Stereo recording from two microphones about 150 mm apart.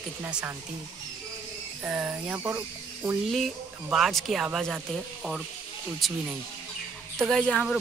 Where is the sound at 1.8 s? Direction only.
5° right (ahead or behind).